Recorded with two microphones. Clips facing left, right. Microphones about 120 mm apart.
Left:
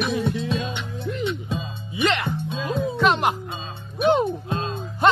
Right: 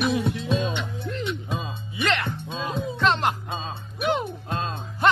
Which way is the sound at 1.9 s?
15° left (ahead or behind).